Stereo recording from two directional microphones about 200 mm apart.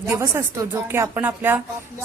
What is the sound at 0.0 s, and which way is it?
A woman's voice, 15° right (ahead or behind).